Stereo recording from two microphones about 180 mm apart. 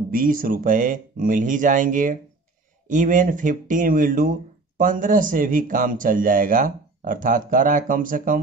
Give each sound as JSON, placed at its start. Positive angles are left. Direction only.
{"t": 0.1, "sound": "speech", "side_deg": -50}